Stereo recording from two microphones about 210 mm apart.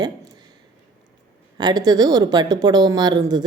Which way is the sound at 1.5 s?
20° right (ahead or behind).